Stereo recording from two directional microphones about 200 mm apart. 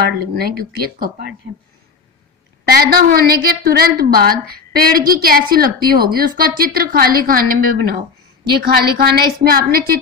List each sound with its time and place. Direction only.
0.3 s a woman's voice: 50° right (ahead or behind)
2.7 s a woman's voice: 50° right (ahead or behind)